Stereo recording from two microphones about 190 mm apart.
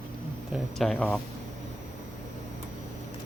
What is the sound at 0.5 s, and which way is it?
Speech, centre (ahead or behind).